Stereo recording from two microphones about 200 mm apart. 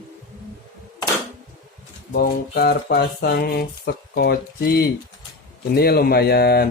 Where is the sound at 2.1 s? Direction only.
55° left (ahead or behind).